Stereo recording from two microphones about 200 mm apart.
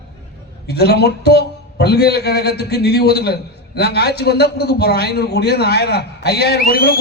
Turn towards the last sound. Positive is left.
turn(degrees=50)  # may be behind; listen again after turning